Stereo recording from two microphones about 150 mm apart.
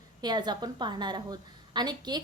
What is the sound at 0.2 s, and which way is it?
A woman's voice, 30° right (ahead or behind).